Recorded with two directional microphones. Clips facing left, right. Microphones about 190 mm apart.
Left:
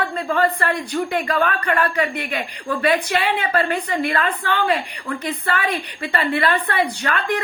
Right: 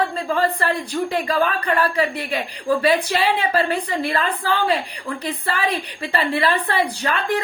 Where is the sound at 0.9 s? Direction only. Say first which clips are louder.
Even; 30° right (ahead or behind).